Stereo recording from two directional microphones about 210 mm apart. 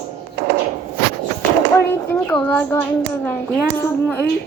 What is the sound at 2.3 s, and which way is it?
Speech, 5° left (ahead or behind).